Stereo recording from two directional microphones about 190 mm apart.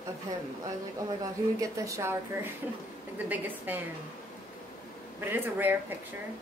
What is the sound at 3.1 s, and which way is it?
Speech, 10° right (ahead or behind).